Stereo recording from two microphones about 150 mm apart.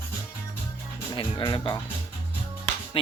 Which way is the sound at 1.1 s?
30° left (ahead or behind).